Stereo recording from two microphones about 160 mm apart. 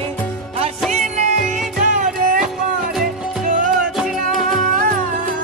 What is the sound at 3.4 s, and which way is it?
Music, 55° right (ahead or behind).